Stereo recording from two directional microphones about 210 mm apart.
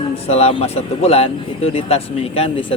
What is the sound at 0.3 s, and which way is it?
Speech, 30° left (ahead or behind).